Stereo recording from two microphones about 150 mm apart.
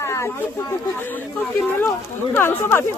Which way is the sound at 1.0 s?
15° left (ahead or behind).